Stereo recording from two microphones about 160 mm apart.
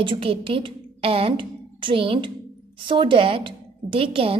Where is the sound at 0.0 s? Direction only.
35° right (ahead or behind).